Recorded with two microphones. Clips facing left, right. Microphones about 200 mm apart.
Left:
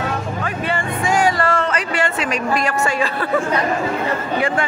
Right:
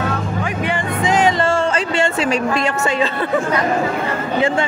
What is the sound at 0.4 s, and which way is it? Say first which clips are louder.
Music: right 2 dB; 15° right (ahead or behind).